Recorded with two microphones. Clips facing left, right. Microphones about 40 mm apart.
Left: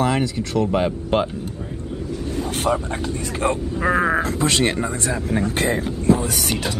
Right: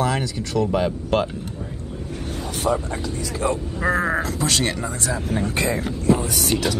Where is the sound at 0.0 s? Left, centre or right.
Left.